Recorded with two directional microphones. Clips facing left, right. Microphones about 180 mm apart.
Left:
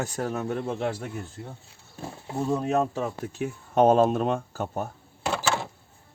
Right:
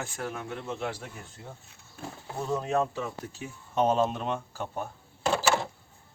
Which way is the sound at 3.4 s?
55° left (ahead or behind).